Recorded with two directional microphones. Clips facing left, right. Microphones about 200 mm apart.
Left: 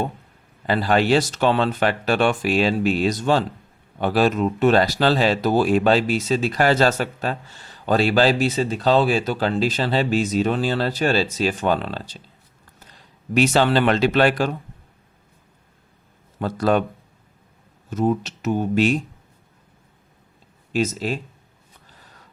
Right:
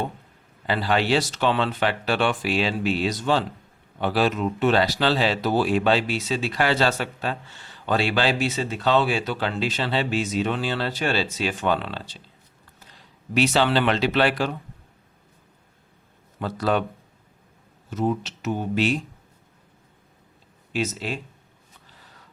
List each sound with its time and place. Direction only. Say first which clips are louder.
0.7 s speech: left 4 dB; 45° left (ahead or behind)
13.3 s speech: left 3 dB; 45° left (ahead or behind)
16.4 s speech: left 4 dB; 45° left (ahead or behind)
17.9 s speech: left 4 dB; 45° left (ahead or behind)
20.7 s speech: left 5 dB; 40° left (ahead or behind)